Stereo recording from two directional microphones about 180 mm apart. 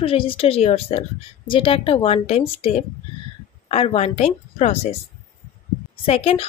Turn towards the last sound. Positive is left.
turn(degrees=35)  # may be behind; listen again after turning